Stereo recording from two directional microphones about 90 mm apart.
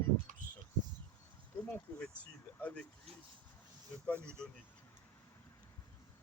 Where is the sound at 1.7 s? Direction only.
25° left (ahead or behind).